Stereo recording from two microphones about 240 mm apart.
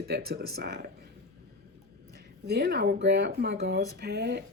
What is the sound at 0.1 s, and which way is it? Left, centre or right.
Speech, right.